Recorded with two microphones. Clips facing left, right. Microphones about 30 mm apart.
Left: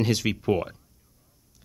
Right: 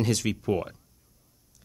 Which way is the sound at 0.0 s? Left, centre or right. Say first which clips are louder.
Left 2 dB; centre.